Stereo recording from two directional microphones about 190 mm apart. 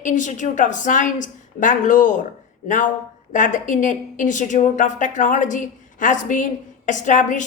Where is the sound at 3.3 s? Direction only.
40° left (ahead or behind).